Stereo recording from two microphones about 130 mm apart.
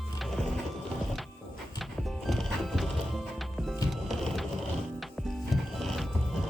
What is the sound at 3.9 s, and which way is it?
Ratchet, centre (ahead or behind).